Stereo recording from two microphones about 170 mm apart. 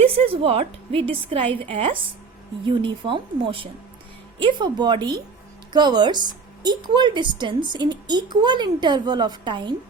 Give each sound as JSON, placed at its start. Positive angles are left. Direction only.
{"t": 0.0, "sound": "a woman's voice", "side_deg": -35}